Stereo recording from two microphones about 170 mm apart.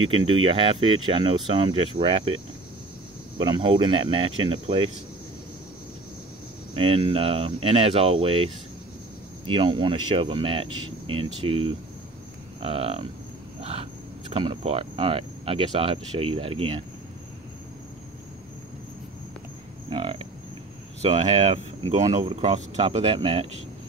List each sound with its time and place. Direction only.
0.0 s speech: 30° right (ahead or behind)
6.7 s speech: 30° right (ahead or behind)
9.5 s speech: 30° right (ahead or behind)
13.6 s cricket: 35° right (ahead or behind)
14.3 s speech: 30° right (ahead or behind)
19.9 s speech: 30° right (ahead or behind)